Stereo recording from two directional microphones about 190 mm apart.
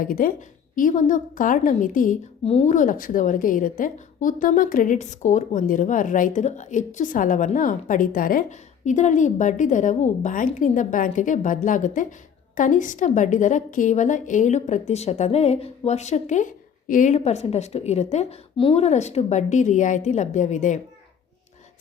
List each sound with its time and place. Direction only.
0.0 s a woman's voice: 45° left (ahead or behind)